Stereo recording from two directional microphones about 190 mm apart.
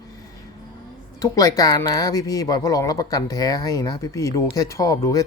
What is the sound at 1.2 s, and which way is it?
A woman's voice, 20° left (ahead or behind).